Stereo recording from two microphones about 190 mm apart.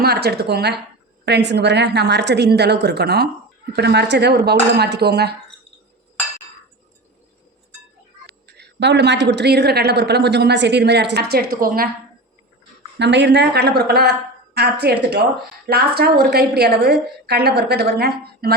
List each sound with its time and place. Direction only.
0.0 s a woman's voice: 60° right (ahead or behind)
8.3 s a woman's voice: 60° right (ahead or behind)
13.0 s a woman's voice: 65° right (ahead or behind)